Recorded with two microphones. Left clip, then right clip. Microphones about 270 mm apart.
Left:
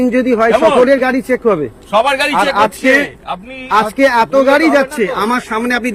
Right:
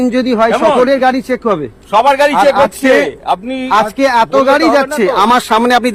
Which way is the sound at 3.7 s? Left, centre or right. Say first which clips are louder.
Even; centre.